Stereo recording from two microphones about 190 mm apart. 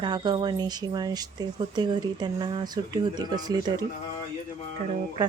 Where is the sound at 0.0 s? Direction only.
25° right (ahead or behind).